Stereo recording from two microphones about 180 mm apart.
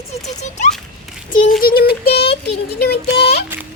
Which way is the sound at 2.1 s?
30° left (ahead or behind).